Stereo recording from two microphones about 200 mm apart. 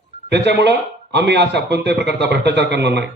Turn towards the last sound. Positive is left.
turn(degrees=-60)  # may be behind; listen again after turning